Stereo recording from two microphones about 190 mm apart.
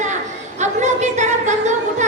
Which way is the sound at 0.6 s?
40° right (ahead or behind).